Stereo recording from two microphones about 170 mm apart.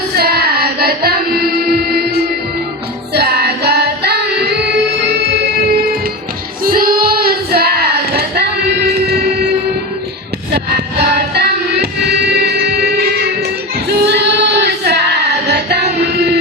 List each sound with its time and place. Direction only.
0.2 s child singing: 65° right (ahead or behind)
3.1 s music: 70° right (ahead or behind)
6.7 s child singing: 60° right (ahead or behind)
10.5 s music: 70° right (ahead or behind)
13.8 s female singing: 85° right